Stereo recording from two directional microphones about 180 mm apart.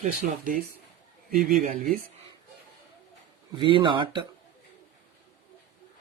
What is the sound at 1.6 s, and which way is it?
Speech, 50° right (ahead or behind).